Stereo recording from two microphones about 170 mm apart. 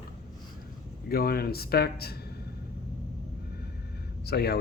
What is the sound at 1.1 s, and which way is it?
Speech, 60° left (ahead or behind).